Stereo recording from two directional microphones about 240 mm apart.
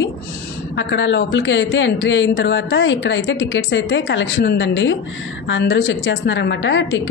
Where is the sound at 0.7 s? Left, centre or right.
Left.